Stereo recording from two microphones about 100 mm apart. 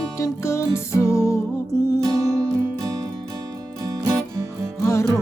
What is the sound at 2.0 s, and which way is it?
Music, 35° right (ahead or behind).